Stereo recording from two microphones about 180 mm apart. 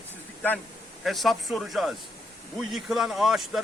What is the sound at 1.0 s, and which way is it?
Speech, centre (ahead or behind).